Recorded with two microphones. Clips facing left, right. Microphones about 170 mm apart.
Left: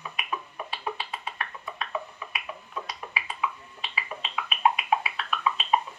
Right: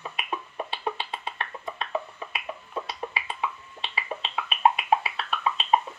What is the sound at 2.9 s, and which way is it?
Finger snapping, 30° right (ahead or behind).